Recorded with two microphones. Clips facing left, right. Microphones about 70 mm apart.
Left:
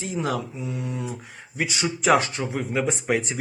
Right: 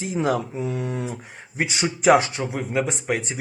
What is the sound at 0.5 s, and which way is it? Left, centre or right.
Speech, right.